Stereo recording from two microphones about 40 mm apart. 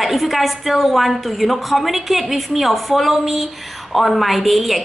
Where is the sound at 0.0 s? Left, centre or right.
Centre.